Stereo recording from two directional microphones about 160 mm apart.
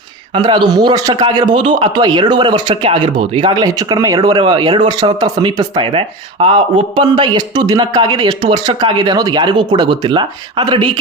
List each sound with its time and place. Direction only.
0.3 s a man's voice: 30° right (ahead or behind)